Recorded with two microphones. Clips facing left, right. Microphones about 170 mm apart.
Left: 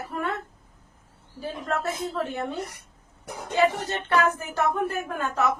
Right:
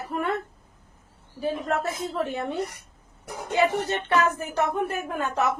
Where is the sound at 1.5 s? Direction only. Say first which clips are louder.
Right 2 dB; 20° right (ahead or behind).